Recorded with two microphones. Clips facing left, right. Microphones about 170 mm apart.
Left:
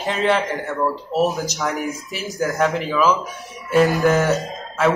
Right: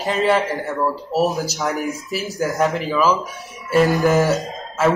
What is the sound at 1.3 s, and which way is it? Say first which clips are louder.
Speech: right 2 dB; 35° right (ahead or behind).